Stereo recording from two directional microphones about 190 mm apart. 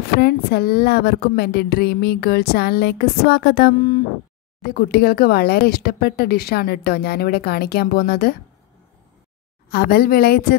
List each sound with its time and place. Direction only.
0.2 s speech: 55° left (ahead or behind)
9.7 s a woman's voice: 55° left (ahead or behind)